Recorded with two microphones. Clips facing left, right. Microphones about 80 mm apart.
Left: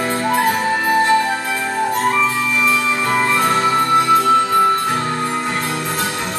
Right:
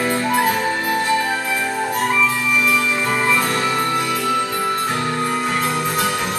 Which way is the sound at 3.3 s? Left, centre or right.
Left.